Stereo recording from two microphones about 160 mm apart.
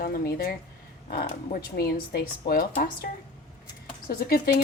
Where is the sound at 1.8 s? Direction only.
70° left (ahead or behind).